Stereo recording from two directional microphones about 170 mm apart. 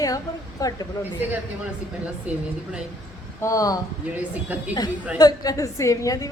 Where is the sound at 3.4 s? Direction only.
20° left (ahead or behind).